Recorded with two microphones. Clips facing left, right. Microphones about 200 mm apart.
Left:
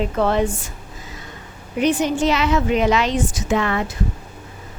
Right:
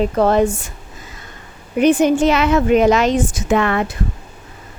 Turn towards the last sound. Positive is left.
turn(degrees=-60)  # may be behind; listen again after turning